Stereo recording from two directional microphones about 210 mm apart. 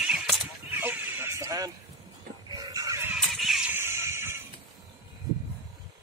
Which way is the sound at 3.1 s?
Centre (ahead or behind).